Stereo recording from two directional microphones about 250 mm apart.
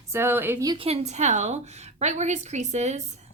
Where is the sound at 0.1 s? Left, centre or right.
Centre.